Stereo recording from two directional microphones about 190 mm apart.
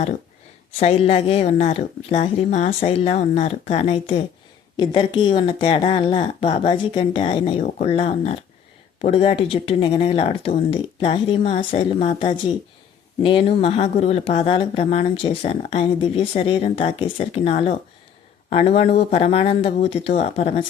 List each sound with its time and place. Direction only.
0.8 s speech: 35° left (ahead or behind)